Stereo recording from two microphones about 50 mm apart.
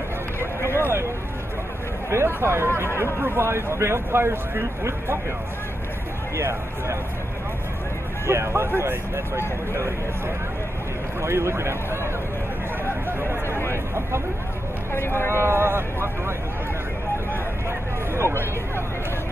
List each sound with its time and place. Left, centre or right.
0.7 s a sound: right
2.2 s speech: right
3.0 s speech: right
6.3 s speech: right
8.3 s speech: right
8.6 s speech: right
11.1 s speech: right
13.7 s a sound: right
14.9 s speech: left
15.3 s speech: right
17.6 s vehicle: right